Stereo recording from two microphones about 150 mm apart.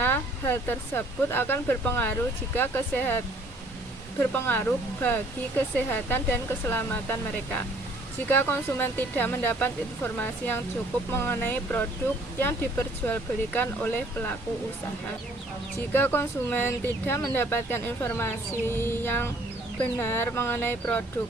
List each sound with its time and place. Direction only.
0.0 s speech: 15° left (ahead or behind)
4.2 s speech: 15° left (ahead or behind)
13.1 s speech: 10° left (ahead or behind)
15.9 s speech: 15° left (ahead or behind)